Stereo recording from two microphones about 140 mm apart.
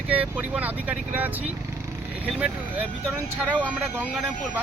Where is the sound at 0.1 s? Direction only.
10° right (ahead or behind).